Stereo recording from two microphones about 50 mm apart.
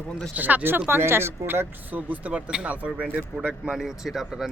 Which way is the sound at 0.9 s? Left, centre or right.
Right.